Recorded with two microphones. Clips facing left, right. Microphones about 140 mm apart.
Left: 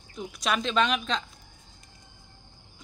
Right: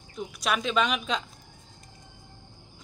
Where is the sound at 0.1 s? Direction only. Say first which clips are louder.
Even; 5° right (ahead or behind).